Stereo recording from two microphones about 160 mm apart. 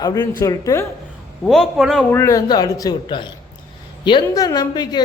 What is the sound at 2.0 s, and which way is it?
A woman's voice, 15° left (ahead or behind).